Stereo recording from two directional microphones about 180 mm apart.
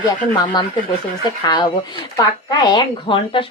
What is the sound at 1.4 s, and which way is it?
A woman's voice, 25° left (ahead or behind).